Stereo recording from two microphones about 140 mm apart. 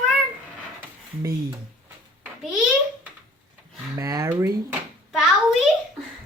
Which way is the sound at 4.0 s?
25° right (ahead or behind).